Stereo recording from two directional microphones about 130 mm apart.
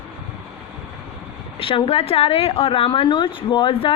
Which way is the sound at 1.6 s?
45° left (ahead or behind).